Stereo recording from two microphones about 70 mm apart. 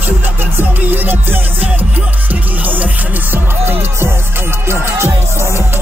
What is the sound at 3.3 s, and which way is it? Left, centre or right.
Music, right.